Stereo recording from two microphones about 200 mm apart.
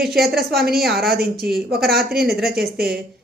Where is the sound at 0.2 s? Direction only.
50° right (ahead or behind).